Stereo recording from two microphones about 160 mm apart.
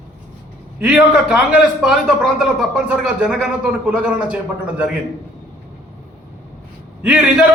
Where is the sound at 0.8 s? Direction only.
5° right (ahead or behind).